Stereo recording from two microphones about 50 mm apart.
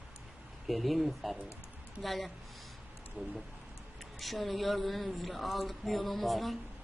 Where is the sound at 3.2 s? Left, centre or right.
Right.